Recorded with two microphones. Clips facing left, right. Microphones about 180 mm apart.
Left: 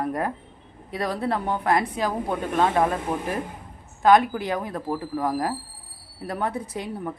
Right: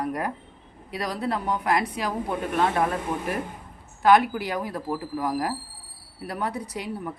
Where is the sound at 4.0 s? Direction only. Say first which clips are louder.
Left 1 dB; 20° left (ahead or behind).